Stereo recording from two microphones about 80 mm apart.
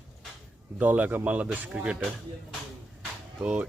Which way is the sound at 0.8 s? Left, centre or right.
Centre.